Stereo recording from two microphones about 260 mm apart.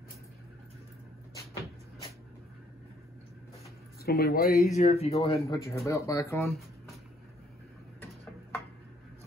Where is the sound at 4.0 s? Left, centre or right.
Left.